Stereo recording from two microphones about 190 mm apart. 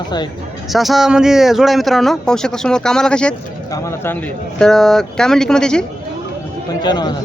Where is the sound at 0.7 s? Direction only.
Centre (ahead or behind).